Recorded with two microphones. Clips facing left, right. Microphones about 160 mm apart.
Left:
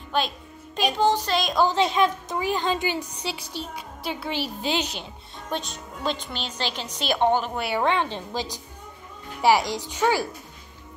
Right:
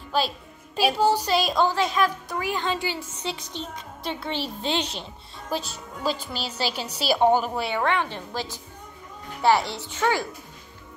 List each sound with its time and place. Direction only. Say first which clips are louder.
0.1 s a woman's voice: right 1 dB; 5° right (ahead or behind)
1.7 s a woman's voice: left 2 dB; 25° left (ahead or behind)
3.5 s speech: left 1 dB; 5° left (ahead or behind)
4.7 s speech: even; 30° right (ahead or behind)
5.5 s a woman's voice: right 1 dB; 5° right (ahead or behind)
7.7 s a woman's voice: left 3 dB; 20° left (ahead or behind)